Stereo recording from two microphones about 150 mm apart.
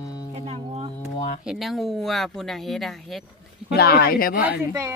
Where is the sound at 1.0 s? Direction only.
50° left (ahead or behind).